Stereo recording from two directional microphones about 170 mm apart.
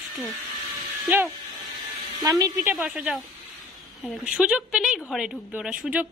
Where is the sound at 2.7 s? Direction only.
10° right (ahead or behind).